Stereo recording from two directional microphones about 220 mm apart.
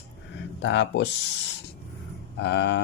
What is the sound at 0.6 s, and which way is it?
Speech, 55° left (ahead or behind).